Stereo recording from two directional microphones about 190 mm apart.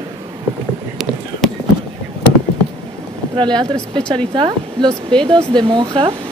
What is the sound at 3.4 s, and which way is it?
Speech, 25° right (ahead or behind).